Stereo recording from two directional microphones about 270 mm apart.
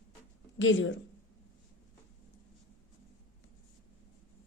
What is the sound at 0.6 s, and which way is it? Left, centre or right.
Speech, left.